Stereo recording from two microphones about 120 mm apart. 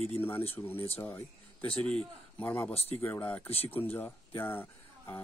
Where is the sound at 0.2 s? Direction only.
20° left (ahead or behind).